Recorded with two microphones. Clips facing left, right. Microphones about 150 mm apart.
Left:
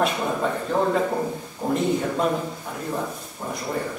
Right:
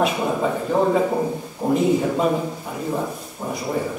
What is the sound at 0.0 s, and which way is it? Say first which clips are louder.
A man's voice: right 3 dB; 5° right (ahead or behind).